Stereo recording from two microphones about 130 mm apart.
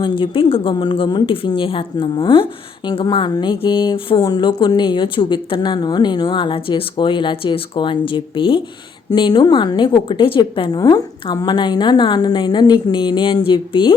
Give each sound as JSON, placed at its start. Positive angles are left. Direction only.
{"t": 0.0, "sound": "a woman's voice", "side_deg": 45}